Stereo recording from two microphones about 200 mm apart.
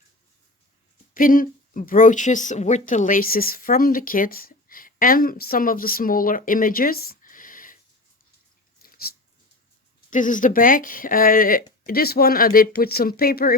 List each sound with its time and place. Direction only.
1.1 s speech: 45° left (ahead or behind)
8.8 s dog: 50° left (ahead or behind)
10.1 s speech: 40° left (ahead or behind)